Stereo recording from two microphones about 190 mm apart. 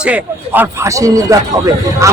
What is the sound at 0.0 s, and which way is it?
A man's voice, 10° right (ahead or behind).